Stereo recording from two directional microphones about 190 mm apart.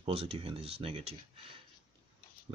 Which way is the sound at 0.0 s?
30° right (ahead or behind).